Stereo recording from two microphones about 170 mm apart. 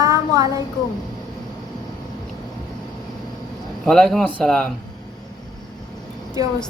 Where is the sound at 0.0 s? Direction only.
20° right (ahead or behind).